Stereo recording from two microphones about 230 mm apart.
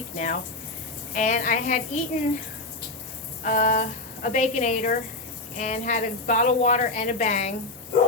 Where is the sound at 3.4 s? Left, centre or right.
Left.